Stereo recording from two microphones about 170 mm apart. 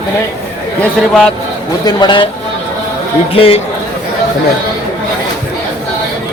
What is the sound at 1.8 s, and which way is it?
Speech, 25° left (ahead or behind).